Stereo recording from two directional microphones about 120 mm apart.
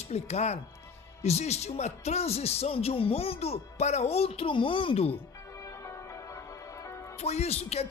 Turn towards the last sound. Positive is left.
turn(degrees=60)  # may be behind; listen again after turning